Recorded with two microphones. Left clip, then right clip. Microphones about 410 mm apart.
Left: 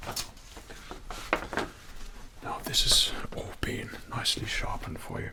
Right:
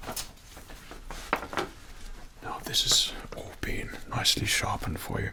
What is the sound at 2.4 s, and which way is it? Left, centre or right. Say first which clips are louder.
Whispering: even; centre.